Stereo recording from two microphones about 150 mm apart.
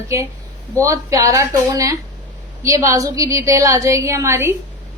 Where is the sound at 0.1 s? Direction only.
20° right (ahead or behind).